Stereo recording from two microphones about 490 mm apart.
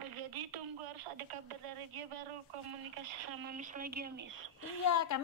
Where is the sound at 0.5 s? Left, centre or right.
Right.